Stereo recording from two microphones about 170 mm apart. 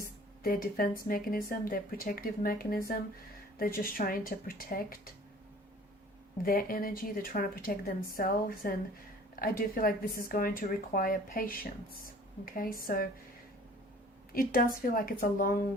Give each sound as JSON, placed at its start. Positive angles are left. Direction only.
{"t": 0.4, "sound": "speech", "side_deg": 60}
{"t": 6.4, "sound": "speech", "side_deg": 55}
{"t": 14.3, "sound": "speech", "side_deg": 55}